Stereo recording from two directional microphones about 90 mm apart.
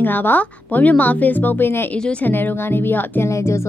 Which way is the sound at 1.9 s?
10° left (ahead or behind).